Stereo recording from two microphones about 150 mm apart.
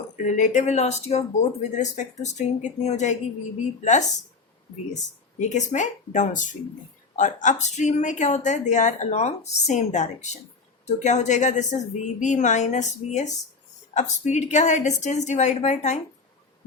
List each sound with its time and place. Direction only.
0.3 s a woman's voice: 55° left (ahead or behind)
5.4 s a woman's voice: 55° left (ahead or behind)